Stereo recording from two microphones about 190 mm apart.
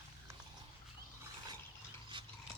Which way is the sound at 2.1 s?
25° right (ahead or behind).